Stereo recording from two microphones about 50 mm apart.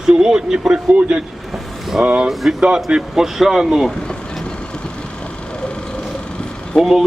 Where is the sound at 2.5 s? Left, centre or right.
Centre.